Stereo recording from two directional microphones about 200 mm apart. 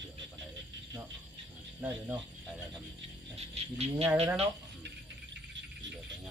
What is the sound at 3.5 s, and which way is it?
Speech, 30° right (ahead or behind).